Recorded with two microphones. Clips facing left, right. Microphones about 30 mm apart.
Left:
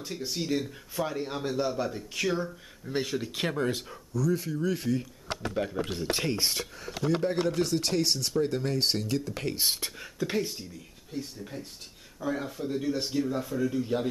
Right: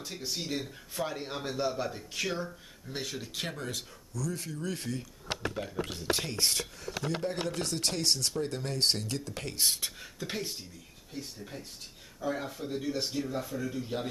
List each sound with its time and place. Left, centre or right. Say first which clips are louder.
0.4 s speech: left 5 dB; centre
2.4 s speech: left 4 dB; centre
3.5 s speech: left 8 dB; left
5.9 s speech: left 3 dB; left; by 10.5 s centre
12.3 s speech: left 3 dB; centre